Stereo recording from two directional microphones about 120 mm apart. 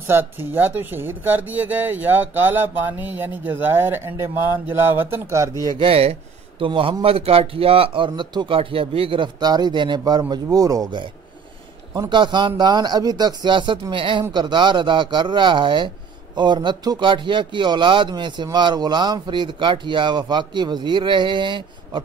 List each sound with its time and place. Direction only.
0.0 s speech: 15° right (ahead or behind)
5.5 s speech: 30° left (ahead or behind)
5.8 s a man's voice: 55° right (ahead or behind)
9.4 s speech: 35° right (ahead or behind)